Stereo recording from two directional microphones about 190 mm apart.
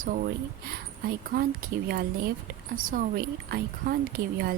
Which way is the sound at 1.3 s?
50° right (ahead or behind).